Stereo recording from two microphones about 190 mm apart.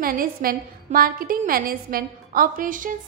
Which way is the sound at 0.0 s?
50° right (ahead or behind).